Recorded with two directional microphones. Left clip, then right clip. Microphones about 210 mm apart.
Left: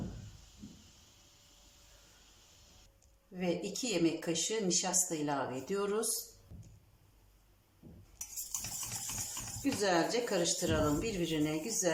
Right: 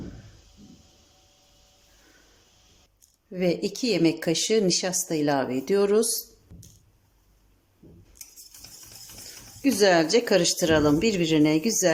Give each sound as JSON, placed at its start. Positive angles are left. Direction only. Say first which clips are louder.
{"t": 3.3, "sound": "speech", "louder": "right 10 dB", "side_deg": -45}
{"t": 6.5, "sound": "a sound", "louder": "right 7 dB", "side_deg": 0}
{"t": 8.2, "sound": "cutlery", "louder": "even", "side_deg": 15}
{"t": 9.8, "sound": "speech", "louder": "right 12 dB", "side_deg": -45}